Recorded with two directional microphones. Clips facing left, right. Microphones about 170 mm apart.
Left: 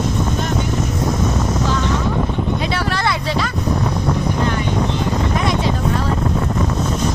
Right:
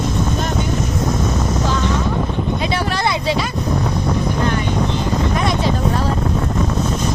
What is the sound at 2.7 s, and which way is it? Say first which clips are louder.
Speech: right 1 dB; 15° right (ahead or behind).